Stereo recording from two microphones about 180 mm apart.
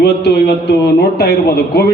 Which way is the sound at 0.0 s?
65° left (ahead or behind).